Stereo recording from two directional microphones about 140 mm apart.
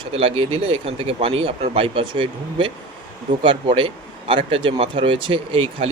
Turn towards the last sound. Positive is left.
turn(degrees=-40)  # may be behind; listen again after turning